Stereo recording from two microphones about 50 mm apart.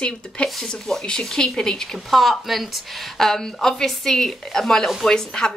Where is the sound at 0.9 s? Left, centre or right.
Centre.